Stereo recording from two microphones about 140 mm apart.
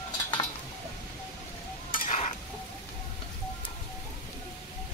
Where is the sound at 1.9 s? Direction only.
75° left (ahead or behind).